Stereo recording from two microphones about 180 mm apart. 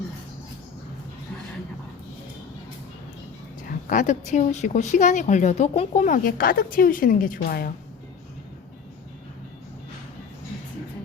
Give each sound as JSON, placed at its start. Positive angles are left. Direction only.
{"t": 3.7, "sound": "speech", "side_deg": 50}
{"t": 6.1, "sound": "speech", "side_deg": 50}